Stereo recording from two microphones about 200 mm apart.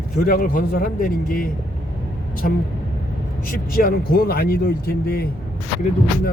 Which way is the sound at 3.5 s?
45° left (ahead or behind).